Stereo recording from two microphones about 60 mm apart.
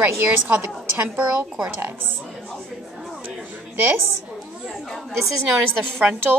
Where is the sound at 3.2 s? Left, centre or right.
Right.